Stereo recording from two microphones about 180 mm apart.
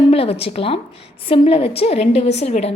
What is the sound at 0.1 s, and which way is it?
A woman's voice, 35° left (ahead or behind).